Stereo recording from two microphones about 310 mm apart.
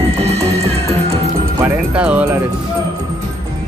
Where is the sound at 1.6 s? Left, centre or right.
Centre.